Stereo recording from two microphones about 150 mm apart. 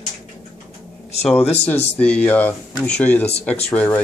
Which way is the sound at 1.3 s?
10° left (ahead or behind).